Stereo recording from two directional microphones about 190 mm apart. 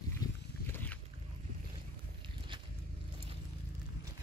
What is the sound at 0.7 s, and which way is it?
Boat, 10° left (ahead or behind).